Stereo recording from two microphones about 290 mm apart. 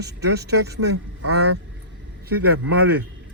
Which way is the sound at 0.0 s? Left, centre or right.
Right.